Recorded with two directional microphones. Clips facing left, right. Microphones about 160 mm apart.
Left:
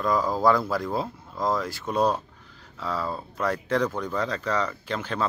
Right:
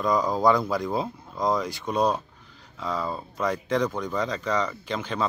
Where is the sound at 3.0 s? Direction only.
15° right (ahead or behind).